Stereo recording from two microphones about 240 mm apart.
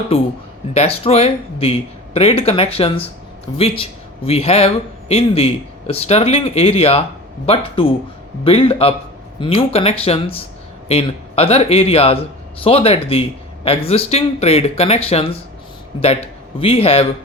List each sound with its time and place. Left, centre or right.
0.1 s a man's voice: left
16.6 s a man's voice: left